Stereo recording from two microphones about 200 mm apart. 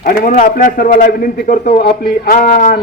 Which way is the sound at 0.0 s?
40° left (ahead or behind).